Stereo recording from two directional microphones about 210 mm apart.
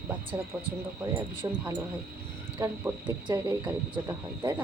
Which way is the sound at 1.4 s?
15° right (ahead or behind).